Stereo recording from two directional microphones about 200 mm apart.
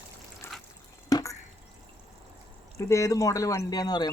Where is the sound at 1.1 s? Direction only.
20° left (ahead or behind).